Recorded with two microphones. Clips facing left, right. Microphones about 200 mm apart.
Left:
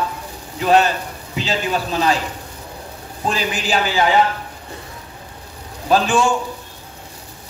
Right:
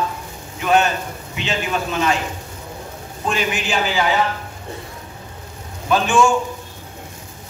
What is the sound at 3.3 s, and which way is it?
Speech, 35° left (ahead or behind).